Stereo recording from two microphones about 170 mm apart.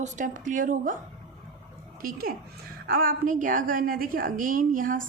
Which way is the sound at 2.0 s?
60° right (ahead or behind).